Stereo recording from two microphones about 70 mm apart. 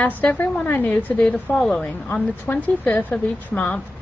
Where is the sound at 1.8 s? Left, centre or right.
Left.